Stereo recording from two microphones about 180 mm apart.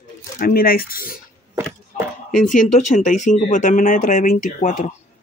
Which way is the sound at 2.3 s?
45° left (ahead or behind).